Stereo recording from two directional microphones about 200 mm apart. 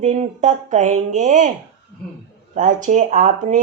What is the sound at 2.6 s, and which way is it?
Speech, 40° right (ahead or behind).